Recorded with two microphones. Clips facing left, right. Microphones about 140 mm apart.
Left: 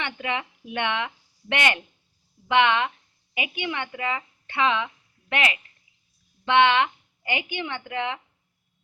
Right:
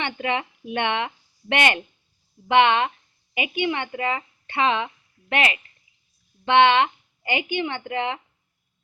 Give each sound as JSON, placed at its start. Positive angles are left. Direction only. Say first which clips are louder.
{"t": 0.0, "sound": "a woman's voice", "louder": "right 4 dB", "side_deg": -25}